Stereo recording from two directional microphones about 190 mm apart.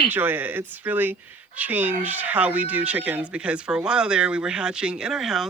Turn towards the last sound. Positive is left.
turn(degrees=0)  # may be behind; listen again after turning